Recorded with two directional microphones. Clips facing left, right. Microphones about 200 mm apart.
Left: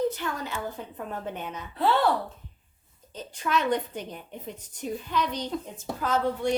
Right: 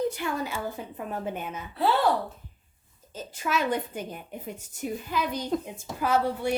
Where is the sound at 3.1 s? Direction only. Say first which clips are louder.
Left 1 dB; 5° right (ahead or behind).